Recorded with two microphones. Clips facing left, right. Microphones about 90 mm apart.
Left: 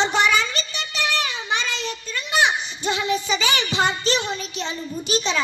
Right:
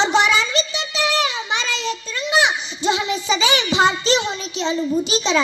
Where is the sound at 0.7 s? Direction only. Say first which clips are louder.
Right 4 dB; 30° right (ahead or behind).